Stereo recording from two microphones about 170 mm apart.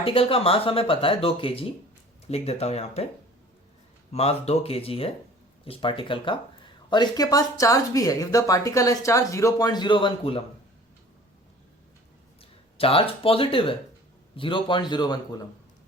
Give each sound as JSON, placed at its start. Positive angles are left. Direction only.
{"t": 0.0, "sound": "speech", "side_deg": 30}
{"t": 4.1, "sound": "speech", "side_deg": 40}
{"t": 12.4, "sound": "speech", "side_deg": 35}